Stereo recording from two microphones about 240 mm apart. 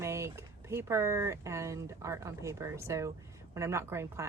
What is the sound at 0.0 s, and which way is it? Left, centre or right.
Speech, centre.